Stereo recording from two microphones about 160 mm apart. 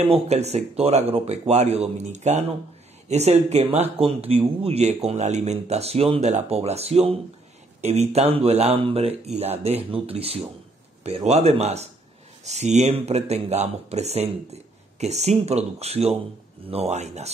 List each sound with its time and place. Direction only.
0.0 s speech: 40° right (ahead or behind)